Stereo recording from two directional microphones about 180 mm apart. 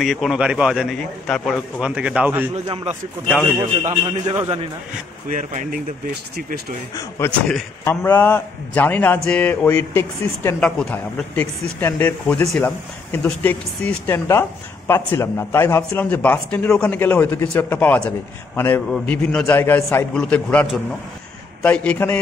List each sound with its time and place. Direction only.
0.0 s a man's voice: centre (ahead or behind)
2.5 s a man's voice: 30° right (ahead or behind)
5.3 s speech: 45° right (ahead or behind)
7.2 s a man's voice: 5° left (ahead or behind)
21.6 s a man's voice: 10° left (ahead or behind)